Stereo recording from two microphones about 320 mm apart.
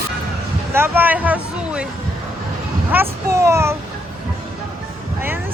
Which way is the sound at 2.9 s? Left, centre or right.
Centre.